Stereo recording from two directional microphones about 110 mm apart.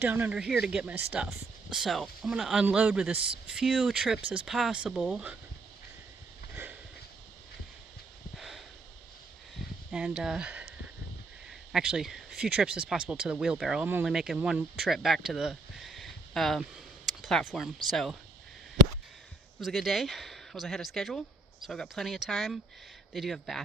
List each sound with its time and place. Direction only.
0.0 s speech: 15° right (ahead or behind)
0.5 s speech: 5° right (ahead or behind)
6.5 s sniff: 20° right (ahead or behind)
8.4 s a sound: centre (ahead or behind)
9.9 s speech: 5° right (ahead or behind)
11.4 s a sound: 5° right (ahead or behind)
12.5 s speech: 10° right (ahead or behind)
19.5 s speech: centre (ahead or behind)